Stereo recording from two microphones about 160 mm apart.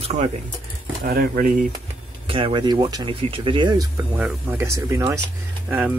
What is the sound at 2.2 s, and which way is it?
Speech, 35° right (ahead or behind).